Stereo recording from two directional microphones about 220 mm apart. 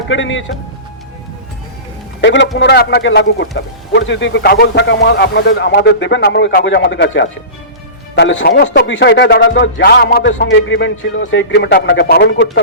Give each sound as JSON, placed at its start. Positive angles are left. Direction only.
{"t": 0.1, "sound": "a man's voice", "side_deg": 60}
{"t": 2.2, "sound": "a man's voice", "side_deg": 55}